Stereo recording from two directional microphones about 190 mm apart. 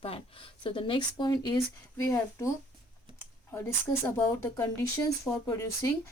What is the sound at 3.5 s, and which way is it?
A woman's voice, 10° left (ahead or behind).